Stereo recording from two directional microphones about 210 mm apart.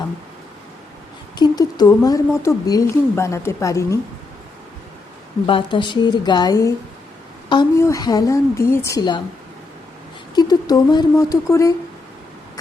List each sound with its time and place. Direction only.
1.4 s speech: 20° left (ahead or behind)
5.5 s a woman's voice: 25° left (ahead or behind)
10.3 s speech: 20° left (ahead or behind)